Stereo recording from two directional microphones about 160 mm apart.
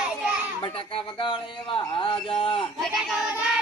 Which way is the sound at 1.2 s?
30° left (ahead or behind).